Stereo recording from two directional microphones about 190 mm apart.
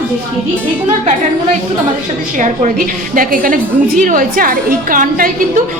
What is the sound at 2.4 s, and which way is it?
A woman's voice, 45° right (ahead or behind).